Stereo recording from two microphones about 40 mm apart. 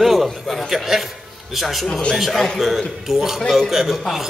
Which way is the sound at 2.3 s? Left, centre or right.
Centre.